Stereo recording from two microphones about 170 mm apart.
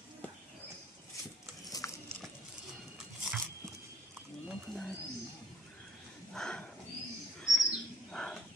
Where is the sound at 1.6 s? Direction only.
20° left (ahead or behind).